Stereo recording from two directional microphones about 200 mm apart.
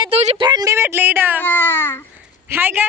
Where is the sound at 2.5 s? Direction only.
10° right (ahead or behind).